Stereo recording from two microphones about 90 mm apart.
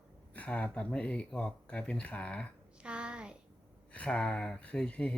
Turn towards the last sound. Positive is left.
turn(degrees=10)  # may be behind; listen again after turning